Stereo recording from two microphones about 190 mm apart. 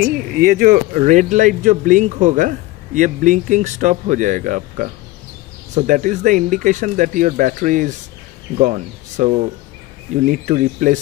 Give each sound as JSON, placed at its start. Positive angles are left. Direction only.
{"t": 0.3, "sound": "speech", "side_deg": -45}